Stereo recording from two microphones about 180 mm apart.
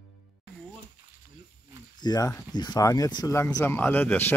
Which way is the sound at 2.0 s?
20° left (ahead or behind).